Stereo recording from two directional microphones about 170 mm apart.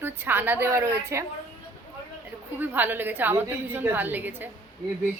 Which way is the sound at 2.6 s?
10° right (ahead or behind).